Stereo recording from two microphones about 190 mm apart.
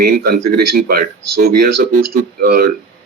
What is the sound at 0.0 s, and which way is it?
Speech, 50° right (ahead or behind).